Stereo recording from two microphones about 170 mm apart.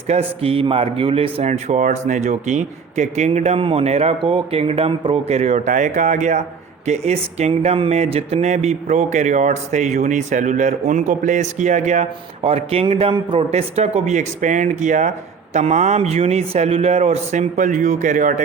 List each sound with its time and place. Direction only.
0.1 s speech: 35° right (ahead or behind)